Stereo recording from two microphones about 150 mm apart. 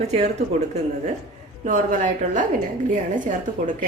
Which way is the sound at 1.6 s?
60° right (ahead or behind).